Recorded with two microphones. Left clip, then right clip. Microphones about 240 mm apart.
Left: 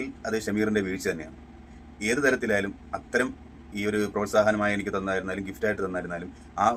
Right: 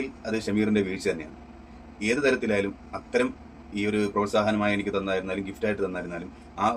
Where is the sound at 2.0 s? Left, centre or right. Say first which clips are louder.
Even; left.